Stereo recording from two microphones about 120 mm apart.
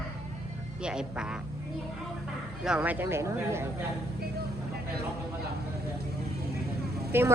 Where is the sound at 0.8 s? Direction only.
5° right (ahead or behind).